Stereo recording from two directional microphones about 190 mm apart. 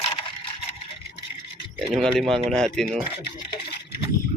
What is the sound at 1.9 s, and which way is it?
Speech, centre (ahead or behind).